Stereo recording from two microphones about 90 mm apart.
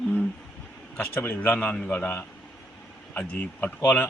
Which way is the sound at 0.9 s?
25° left (ahead or behind).